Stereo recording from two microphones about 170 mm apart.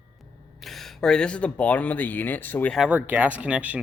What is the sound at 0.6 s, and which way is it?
Speech, centre (ahead or behind).